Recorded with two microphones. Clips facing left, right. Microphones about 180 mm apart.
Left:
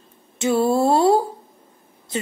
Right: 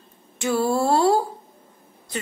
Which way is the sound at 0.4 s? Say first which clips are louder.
Left 3 dB; 20° left (ahead or behind).